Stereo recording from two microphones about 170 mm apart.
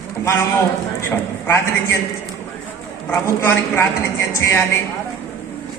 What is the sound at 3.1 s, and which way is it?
A man's voice, 15° left (ahead or behind).